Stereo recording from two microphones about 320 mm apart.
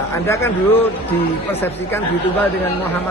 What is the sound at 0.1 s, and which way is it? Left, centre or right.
Speech, centre.